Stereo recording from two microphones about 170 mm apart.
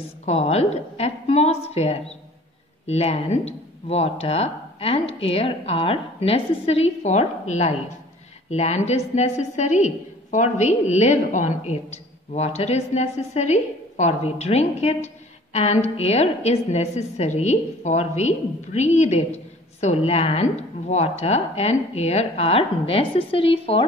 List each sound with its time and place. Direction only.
0.2 s a woman's voice: 40° left (ahead or behind)